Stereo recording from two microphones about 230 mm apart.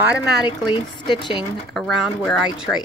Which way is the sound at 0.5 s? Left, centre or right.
Left.